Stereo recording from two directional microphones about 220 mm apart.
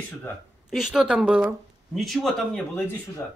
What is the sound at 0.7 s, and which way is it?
Speech, centre (ahead or behind).